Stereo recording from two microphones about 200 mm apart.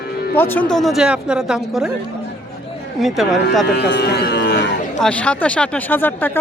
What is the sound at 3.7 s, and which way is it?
Speech, 55° left (ahead or behind).